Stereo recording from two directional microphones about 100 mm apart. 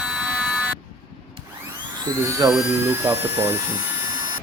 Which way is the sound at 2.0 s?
35° right (ahead or behind).